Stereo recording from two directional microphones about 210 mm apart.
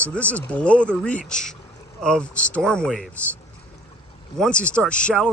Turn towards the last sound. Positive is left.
turn(degrees=5)  # may be behind; listen again after turning